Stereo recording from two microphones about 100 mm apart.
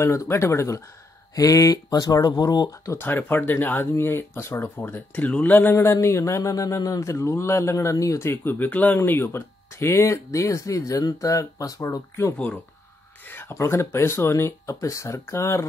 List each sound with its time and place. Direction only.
0.0 s speech: 30° left (ahead or behind); by 2.9 s 45° left (ahead or behind)
2.9 s speech: 20° left (ahead or behind)
8.3 s speech: 20° left (ahead or behind)